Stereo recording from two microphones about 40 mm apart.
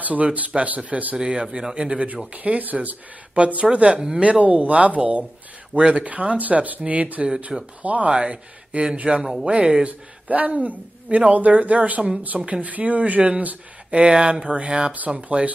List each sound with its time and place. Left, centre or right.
0.0 s speech: right
1.1 s speech: centre
2.3 s speech: right
4.2 s speech: right
5.8 s speech: right
6.0 s speech: right
8.1 s speech: right
8.9 s speech: right
9.2 s speech: centre
9.8 s speech: right
12.6 s speech: right
13.9 s speech: right